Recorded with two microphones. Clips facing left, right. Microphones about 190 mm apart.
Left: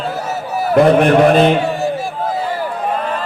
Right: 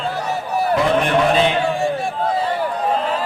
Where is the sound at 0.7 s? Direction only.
50° left (ahead or behind).